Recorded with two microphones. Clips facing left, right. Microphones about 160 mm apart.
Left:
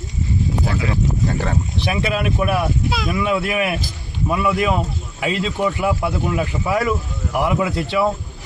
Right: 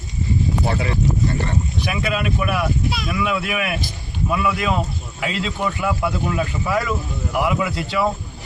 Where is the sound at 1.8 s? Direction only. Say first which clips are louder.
Left 3 dB; 30° left (ahead or behind).